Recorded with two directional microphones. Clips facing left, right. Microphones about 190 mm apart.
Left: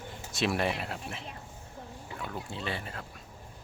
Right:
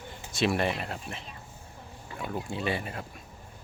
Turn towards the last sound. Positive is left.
turn(degrees=-15)  # may be behind; listen again after turning